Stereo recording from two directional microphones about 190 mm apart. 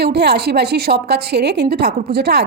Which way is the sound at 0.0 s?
60° right (ahead or behind).